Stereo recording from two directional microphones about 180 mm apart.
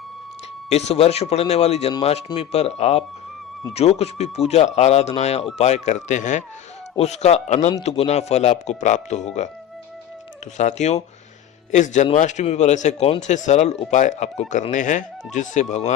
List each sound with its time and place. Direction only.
0.7 s speech: 35° left (ahead or behind)
10.6 s speech: 40° left (ahead or behind)